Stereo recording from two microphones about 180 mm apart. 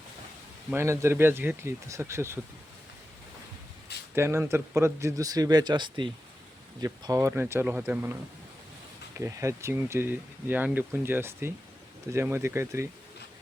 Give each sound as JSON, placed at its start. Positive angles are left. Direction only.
{"t": 0.7, "sound": "speech", "side_deg": -15}
{"t": 4.1, "sound": "speech", "side_deg": -15}